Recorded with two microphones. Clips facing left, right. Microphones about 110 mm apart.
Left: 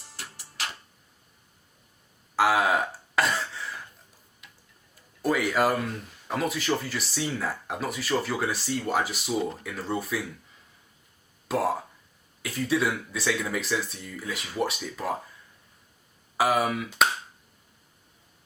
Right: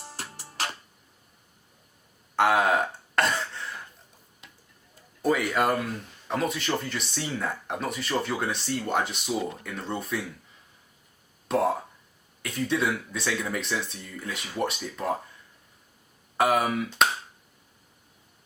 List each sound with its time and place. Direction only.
0.0 s music: 50° right (ahead or behind)
0.3 s music: 35° right (ahead or behind)
2.3 s throat clearing: centre (ahead or behind)
4.4 s tick-tock: 30° right (ahead or behind)
5.2 s speech: centre (ahead or behind)
11.4 s speech: centre (ahead or behind)
16.4 s speech: centre (ahead or behind)